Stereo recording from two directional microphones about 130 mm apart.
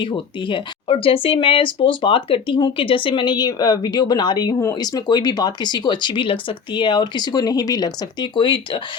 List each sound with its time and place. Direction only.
0.0 s speech: 40° left (ahead or behind)